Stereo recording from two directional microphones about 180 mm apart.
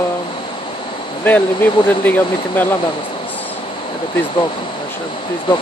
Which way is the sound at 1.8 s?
10° left (ahead or behind).